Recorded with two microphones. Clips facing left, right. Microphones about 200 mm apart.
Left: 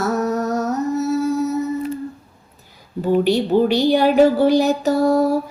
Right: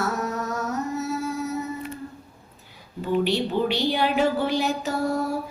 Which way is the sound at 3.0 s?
45° left (ahead or behind).